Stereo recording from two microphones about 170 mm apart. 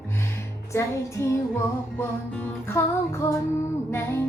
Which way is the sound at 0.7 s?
15° left (ahead or behind).